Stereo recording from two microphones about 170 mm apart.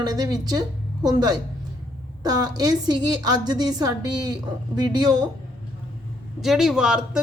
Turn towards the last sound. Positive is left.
turn(degrees=-5)  # may be behind; listen again after turning